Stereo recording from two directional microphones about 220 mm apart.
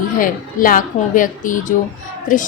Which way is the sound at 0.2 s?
40° left (ahead or behind).